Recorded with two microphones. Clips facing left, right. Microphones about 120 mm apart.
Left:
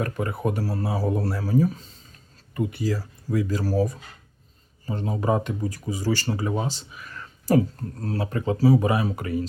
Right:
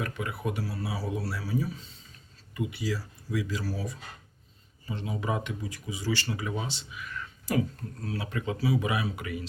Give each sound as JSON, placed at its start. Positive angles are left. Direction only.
{"t": 0.0, "sound": "speech", "side_deg": 45}